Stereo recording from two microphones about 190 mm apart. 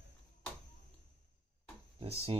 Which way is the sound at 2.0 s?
30° right (ahead or behind).